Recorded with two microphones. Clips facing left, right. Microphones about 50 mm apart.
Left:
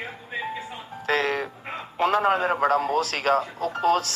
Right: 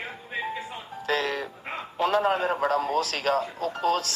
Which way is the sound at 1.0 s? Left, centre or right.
Left.